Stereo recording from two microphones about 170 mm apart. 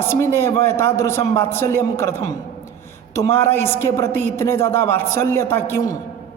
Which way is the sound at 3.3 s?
15° left (ahead or behind).